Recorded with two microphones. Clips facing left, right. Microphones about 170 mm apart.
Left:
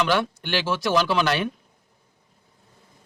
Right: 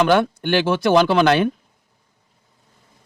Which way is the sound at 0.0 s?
50° right (ahead or behind).